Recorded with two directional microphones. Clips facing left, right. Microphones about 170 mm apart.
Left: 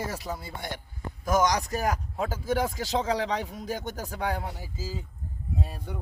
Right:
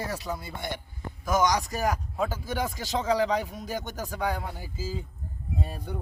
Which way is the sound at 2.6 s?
30° left (ahead or behind).